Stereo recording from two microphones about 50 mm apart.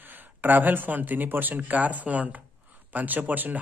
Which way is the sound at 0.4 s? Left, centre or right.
Right.